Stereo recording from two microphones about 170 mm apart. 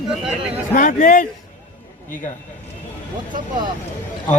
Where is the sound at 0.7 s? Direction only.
50° left (ahead or behind).